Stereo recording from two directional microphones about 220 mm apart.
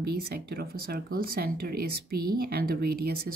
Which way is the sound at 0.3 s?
45° right (ahead or behind).